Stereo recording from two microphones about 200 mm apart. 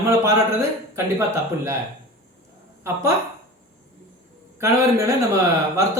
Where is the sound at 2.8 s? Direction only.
15° right (ahead or behind).